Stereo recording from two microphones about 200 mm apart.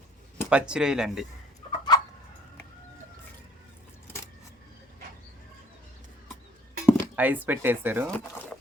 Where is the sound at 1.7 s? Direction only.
20° left (ahead or behind).